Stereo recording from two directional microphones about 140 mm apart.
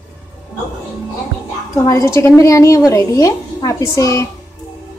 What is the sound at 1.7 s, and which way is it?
A woman's voice, 25° left (ahead or behind).